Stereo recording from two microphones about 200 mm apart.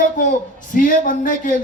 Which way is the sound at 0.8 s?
45° left (ahead or behind).